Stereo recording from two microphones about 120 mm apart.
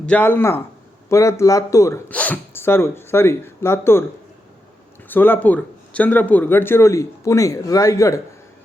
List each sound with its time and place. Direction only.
0.0 s speech: 15° left (ahead or behind)
2.0 s speech: 15° left (ahead or behind)
5.0 s speech: 15° left (ahead or behind)